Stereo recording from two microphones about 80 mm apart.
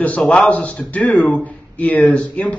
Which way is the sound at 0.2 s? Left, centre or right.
Centre.